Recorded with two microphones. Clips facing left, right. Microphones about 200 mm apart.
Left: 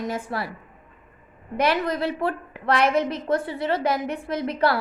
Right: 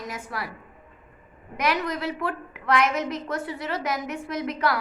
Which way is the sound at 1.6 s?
30° left (ahead or behind).